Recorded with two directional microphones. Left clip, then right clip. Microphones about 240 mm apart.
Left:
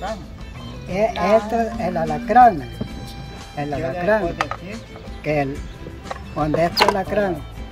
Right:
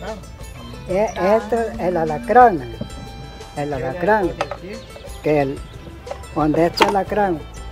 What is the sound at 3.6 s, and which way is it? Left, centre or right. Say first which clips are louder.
Speech: right 1 dB; right.